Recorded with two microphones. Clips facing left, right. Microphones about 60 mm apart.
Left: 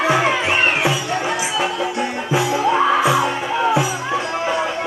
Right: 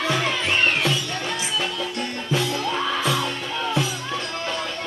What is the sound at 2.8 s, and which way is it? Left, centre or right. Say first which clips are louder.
Music: left 8 dB; left.